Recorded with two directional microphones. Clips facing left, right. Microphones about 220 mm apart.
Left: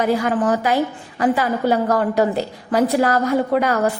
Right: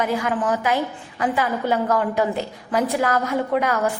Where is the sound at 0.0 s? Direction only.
35° left (ahead or behind).